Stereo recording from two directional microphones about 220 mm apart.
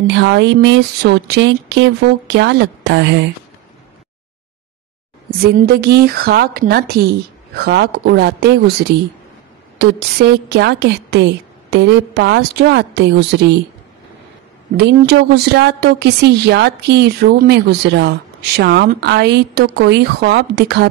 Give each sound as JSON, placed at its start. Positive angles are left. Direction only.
{"t": 0.0, "sound": "a woman's voice", "side_deg": -50}
{"t": 5.4, "sound": "a woman's voice", "side_deg": -45}
{"t": 14.8, "sound": "a woman's voice", "side_deg": -50}